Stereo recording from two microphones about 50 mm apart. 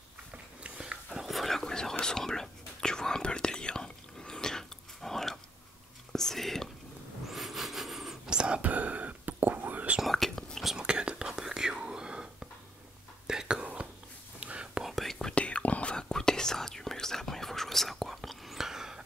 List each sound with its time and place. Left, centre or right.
0.7 s dog: centre
1.2 s whispering: centre
7.2 s wood: centre
8.3 s whispering: centre
8.5 s whispering: right
10.0 s whispering: centre
10.8 s whispering: centre
14.9 s whispering: centre
15.3 s whispering: left; by 19.0 s centre